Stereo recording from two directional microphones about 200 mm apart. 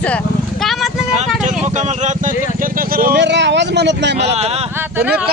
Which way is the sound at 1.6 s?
35° right (ahead or behind).